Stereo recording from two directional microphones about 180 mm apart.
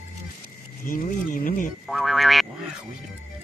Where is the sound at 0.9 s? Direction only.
50° left (ahead or behind).